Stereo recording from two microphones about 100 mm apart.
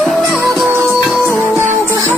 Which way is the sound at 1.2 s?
25° right (ahead or behind).